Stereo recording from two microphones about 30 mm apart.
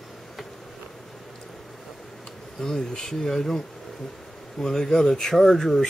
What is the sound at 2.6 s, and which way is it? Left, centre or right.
Speech, left.